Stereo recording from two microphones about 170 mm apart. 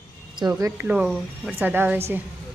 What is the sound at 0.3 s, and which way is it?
Speech, 20° right (ahead or behind).